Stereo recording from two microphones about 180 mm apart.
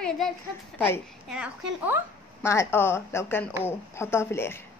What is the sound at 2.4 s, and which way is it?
A woman's voice, 15° left (ahead or behind).